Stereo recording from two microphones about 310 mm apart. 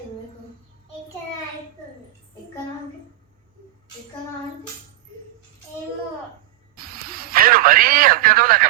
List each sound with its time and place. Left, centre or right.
6.7 s radio: right